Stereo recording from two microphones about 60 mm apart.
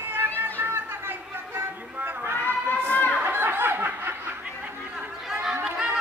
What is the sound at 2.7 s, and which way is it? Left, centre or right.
Chatter, right.